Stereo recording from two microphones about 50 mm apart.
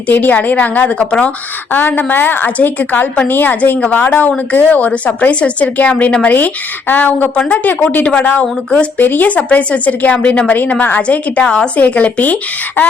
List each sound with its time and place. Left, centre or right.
0.1 s a woman's voice: left
0.9 s speech: left
1.7 s a woman's voice: left
10.5 s a woman's voice: left
11.4 s a woman's voice: centre
11.8 s a woman's voice: left